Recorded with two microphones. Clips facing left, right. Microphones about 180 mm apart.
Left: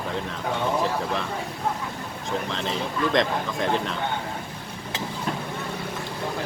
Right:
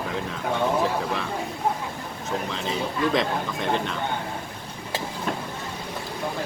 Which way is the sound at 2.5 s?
5° right (ahead or behind).